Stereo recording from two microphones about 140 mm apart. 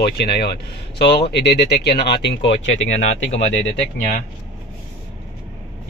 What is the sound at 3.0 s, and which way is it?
Speech, 55° left (ahead or behind).